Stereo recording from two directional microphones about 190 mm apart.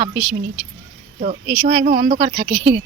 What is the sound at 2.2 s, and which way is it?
Speech, 30° right (ahead or behind).